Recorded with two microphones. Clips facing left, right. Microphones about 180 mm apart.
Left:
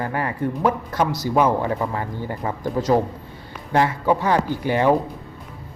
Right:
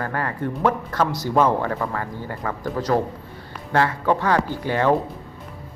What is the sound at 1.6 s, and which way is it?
Speech, 15° left (ahead or behind).